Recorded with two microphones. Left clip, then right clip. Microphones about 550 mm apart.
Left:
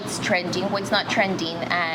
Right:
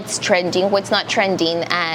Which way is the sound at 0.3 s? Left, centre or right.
Right.